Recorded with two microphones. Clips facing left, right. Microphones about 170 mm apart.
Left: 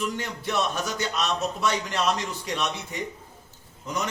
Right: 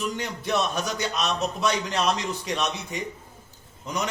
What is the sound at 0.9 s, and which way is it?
A man's voice, 20° right (ahead or behind).